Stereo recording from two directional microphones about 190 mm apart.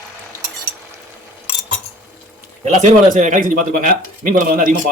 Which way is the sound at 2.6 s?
40° right (ahead or behind).